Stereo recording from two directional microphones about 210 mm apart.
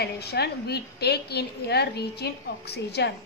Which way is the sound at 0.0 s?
50° left (ahead or behind).